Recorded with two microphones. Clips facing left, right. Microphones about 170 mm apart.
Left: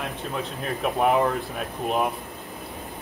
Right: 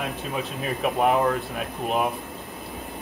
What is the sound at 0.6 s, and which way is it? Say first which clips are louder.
Speech: right 1 dB; centre (ahead or behind).